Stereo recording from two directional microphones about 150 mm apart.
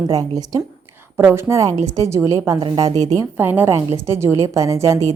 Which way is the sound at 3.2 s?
15° right (ahead or behind).